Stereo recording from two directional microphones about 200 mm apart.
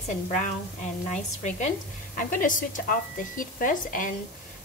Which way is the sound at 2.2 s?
40° left (ahead or behind).